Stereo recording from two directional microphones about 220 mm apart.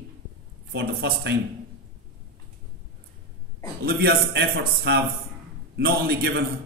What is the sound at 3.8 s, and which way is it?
A man's voice, 45° right (ahead or behind).